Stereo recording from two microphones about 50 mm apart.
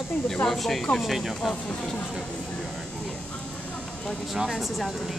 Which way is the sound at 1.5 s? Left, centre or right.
Centre.